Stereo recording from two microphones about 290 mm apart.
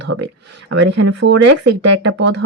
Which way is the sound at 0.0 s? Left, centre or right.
Right.